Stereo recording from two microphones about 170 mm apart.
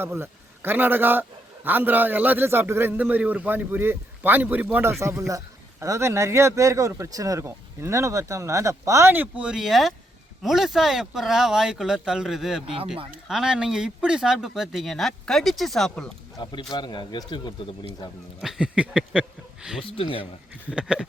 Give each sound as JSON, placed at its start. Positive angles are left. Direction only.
{"t": 0.0, "sound": "a man's voice", "side_deg": -15}
{"t": 12.6, "sound": "speech", "side_deg": -35}
{"t": 13.2, "sound": "speech", "side_deg": -5}
{"t": 16.4, "sound": "speech", "side_deg": 25}
{"t": 18.3, "sound": "speech", "side_deg": 0}
{"t": 20.0, "sound": "speech", "side_deg": 30}
{"t": 20.7, "sound": "speech", "side_deg": -5}